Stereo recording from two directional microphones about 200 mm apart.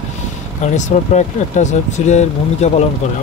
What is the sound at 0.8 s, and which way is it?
Speech, 35° left (ahead or behind).